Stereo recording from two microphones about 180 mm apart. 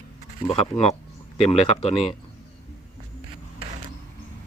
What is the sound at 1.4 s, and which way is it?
Speech, 35° left (ahead or behind).